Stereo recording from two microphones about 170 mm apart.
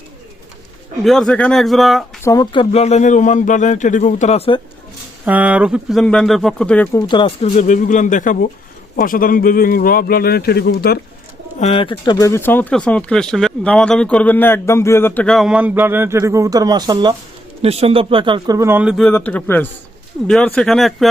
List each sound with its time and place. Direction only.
1.0 s speech: 5° left (ahead or behind)
2.2 s speech: 20° left (ahead or behind)
5.2 s speech: 10° right (ahead or behind)
6.9 s speech: 25° left (ahead or behind)
7.5 s speech: 50° left (ahead or behind); by 11.0 s 65° left (ahead or behind)
11.6 s speech: 35° left (ahead or behind); by 17.2 s 25° right (ahead or behind)
17.6 s speech: 35° right (ahead or behind); by 19.0 s 5° right (ahead or behind)
19.1 s a man's voice: 10° left (ahead or behind)